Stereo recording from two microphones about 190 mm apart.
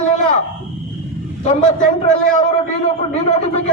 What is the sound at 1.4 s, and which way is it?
A man's voice, 40° left (ahead or behind).